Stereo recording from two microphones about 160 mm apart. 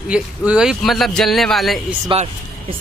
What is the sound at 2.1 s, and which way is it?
Speech, 35° right (ahead or behind).